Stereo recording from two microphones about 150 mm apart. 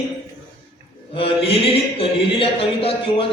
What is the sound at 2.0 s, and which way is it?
A man's voice, 40° left (ahead or behind).